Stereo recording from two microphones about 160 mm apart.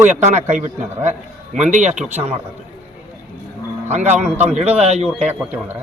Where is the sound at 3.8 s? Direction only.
45° right (ahead or behind).